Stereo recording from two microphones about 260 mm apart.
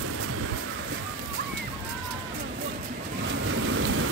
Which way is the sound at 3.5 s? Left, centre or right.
Right.